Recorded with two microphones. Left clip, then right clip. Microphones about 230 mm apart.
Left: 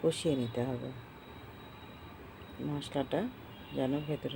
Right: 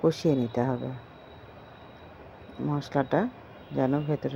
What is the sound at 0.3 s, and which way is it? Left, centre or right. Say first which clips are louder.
Speech: right 7 dB; right.